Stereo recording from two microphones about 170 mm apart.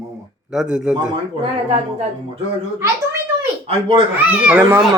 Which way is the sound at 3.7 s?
35° right (ahead or behind).